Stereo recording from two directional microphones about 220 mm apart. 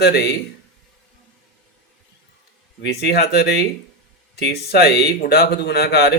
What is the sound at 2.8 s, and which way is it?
Speech, 50° left (ahead or behind).